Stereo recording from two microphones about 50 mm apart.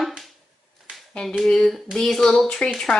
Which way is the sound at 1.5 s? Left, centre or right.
Centre.